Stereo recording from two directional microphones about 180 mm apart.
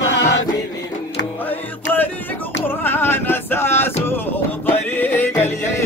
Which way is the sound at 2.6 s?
10° left (ahead or behind).